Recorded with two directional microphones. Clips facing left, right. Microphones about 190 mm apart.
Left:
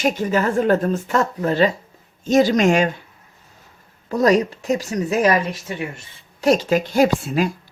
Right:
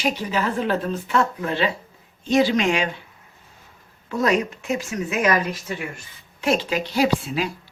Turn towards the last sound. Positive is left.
turn(degrees=45)  # may be behind; listen again after turning